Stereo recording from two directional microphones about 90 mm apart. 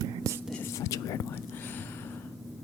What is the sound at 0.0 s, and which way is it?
Whispering, 40° right (ahead or behind).